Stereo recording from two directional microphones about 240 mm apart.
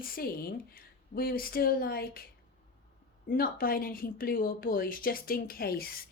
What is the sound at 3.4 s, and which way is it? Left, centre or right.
Speech, left.